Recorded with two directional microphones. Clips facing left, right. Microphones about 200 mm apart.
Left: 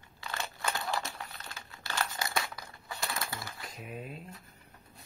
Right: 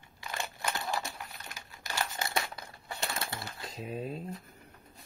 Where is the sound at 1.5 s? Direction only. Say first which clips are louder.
Even; 15° right (ahead or behind).